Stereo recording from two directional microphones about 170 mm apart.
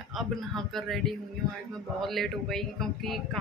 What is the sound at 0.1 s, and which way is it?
A woman's voice, centre (ahead or behind).